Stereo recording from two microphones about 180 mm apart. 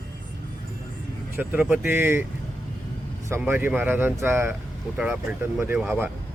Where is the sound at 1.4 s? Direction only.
10° right (ahead or behind).